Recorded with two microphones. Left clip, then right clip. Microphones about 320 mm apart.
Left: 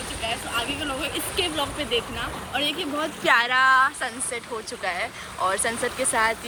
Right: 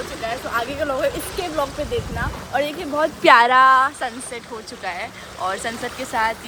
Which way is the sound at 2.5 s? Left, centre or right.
Right.